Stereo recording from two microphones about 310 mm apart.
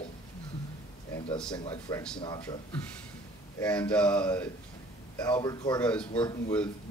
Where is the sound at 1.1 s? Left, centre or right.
Centre.